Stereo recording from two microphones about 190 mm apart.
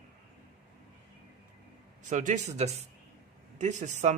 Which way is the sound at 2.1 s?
40° right (ahead or behind).